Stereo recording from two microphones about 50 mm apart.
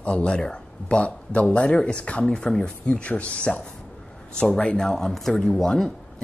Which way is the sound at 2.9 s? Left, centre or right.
Left.